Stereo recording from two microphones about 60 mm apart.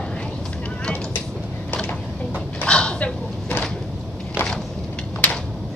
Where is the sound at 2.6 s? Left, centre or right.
Centre.